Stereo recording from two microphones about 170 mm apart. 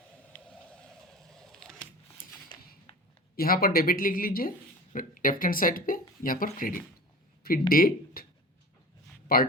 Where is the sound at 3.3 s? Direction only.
60° left (ahead or behind).